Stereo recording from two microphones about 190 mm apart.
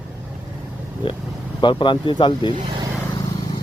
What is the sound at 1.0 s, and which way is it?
Speech, 25° left (ahead or behind).